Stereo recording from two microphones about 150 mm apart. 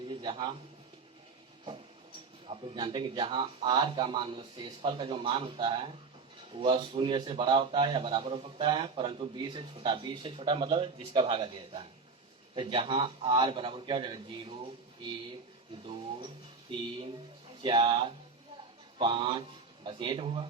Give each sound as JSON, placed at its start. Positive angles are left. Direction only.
{"t": 0.1, "sound": "a sound", "side_deg": -30}
{"t": 2.5, "sound": "a man's voice", "side_deg": -30}
{"t": 17.6, "sound": "a man's voice", "side_deg": -30}